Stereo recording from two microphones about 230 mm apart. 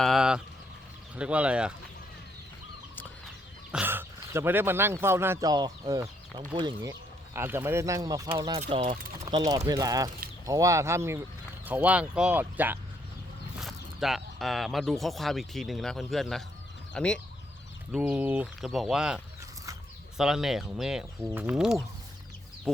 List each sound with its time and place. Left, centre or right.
0.0 s a sound: centre
1.1 s speech: centre
3.7 s speech: centre